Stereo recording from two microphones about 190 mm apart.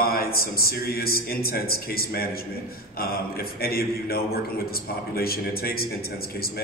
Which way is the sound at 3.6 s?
55° left (ahead or behind).